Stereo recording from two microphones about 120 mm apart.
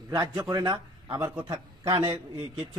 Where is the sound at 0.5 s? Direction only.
30° right (ahead or behind).